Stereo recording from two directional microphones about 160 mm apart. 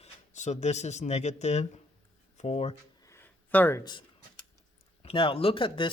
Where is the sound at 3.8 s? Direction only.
30° left (ahead or behind).